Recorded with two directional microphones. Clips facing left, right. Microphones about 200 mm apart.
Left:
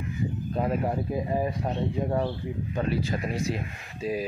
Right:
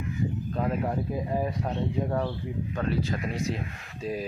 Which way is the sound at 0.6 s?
5° left (ahead or behind).